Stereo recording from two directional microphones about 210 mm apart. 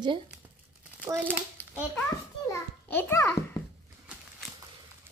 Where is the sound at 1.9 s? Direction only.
15° left (ahead or behind).